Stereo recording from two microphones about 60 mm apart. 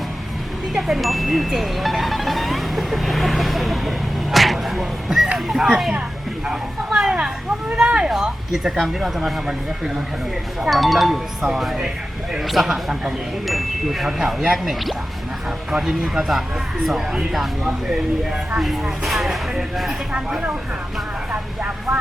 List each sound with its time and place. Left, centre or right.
0.7 s speech: centre
8.1 s speech: centre
18.6 s speech: centre